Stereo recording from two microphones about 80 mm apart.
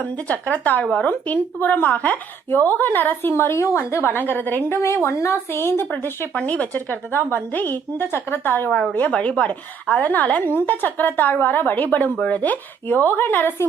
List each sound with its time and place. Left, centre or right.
0.3 s a woman's voice: centre
5.0 s a woman's voice: left